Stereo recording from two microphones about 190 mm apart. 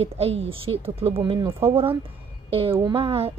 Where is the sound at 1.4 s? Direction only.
15° right (ahead or behind).